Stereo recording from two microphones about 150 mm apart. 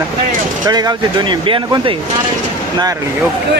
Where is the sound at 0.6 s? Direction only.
25° right (ahead or behind).